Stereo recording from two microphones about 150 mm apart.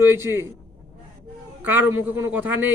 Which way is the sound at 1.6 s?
10° right (ahead or behind).